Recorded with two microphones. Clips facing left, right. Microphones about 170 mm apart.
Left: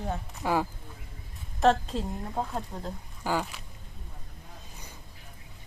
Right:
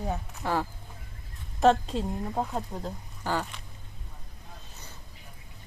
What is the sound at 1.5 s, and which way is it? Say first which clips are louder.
Speech: right 1 dB; centre (ahead or behind).